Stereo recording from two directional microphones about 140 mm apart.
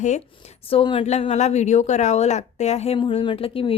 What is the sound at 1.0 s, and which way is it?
A woman's voice, 50° left (ahead or behind).